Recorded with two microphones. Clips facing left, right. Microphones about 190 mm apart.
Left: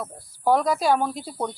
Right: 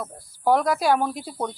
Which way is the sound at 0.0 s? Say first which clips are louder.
Even; centre (ahead or behind).